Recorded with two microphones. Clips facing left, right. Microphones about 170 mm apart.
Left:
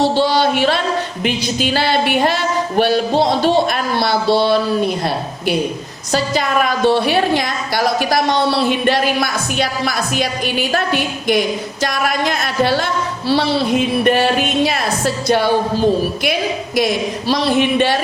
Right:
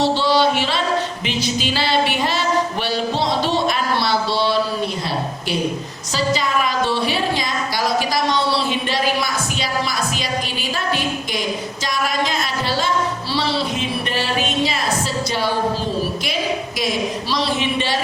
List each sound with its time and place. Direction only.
0.0 s a sound: 50° left (ahead or behind)
1.2 s speech: 50° left (ahead or behind)
6.1 s a woman's voice: 55° left (ahead or behind)